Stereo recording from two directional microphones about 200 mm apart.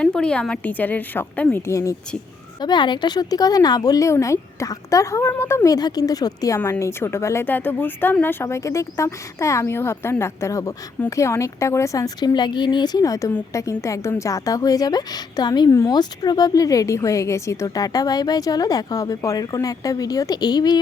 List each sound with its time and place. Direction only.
0.0 s a woman's voice: 5° left (ahead or behind); by 20.7 s 20° left (ahead or behind)